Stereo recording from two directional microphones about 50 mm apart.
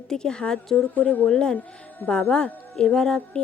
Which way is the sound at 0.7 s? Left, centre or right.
Left.